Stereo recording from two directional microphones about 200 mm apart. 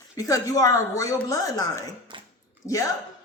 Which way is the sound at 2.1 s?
25° right (ahead or behind).